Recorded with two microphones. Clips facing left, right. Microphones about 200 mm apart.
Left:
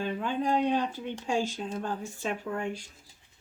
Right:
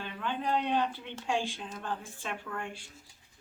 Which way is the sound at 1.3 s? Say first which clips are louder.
Left 3 dB; 40° left (ahead or behind).